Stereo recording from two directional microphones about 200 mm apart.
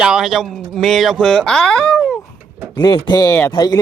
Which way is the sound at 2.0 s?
5° right (ahead or behind).